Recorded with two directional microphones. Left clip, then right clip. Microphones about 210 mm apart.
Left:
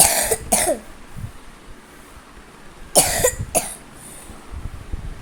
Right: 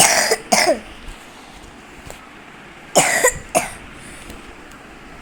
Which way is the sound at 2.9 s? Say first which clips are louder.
Right 3 dB; 10° left (ahead or behind).